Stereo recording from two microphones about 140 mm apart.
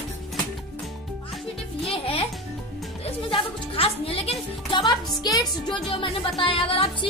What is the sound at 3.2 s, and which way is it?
Speech, 40° left (ahead or behind).